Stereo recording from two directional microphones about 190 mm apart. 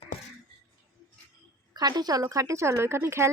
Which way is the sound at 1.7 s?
20° right (ahead or behind).